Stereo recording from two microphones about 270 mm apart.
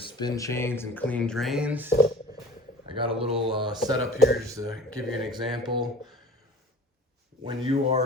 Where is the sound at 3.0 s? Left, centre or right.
Centre.